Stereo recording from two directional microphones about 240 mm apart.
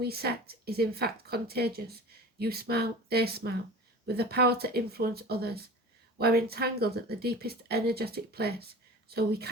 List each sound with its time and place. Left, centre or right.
0.0 s speech: right